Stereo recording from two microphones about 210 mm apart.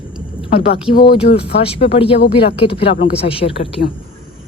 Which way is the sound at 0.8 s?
25° left (ahead or behind).